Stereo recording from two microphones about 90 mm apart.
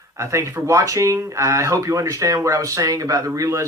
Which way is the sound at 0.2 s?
35° right (ahead or behind).